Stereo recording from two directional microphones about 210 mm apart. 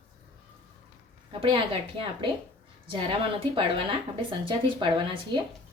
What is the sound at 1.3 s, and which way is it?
Speech, 25° right (ahead or behind).